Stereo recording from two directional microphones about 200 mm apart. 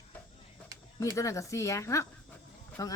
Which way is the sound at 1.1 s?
15° left (ahead or behind).